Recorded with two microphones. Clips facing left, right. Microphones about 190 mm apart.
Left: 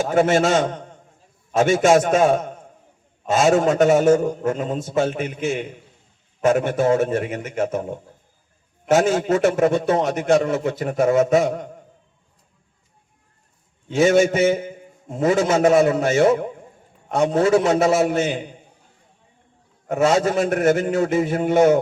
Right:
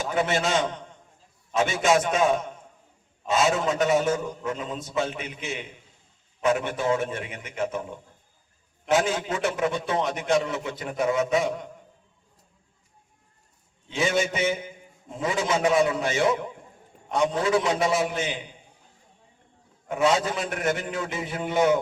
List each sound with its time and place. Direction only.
0.0 s a man's voice: 50° left (ahead or behind)
13.8 s a man's voice: 50° left (ahead or behind)
19.9 s a man's voice: 50° left (ahead or behind)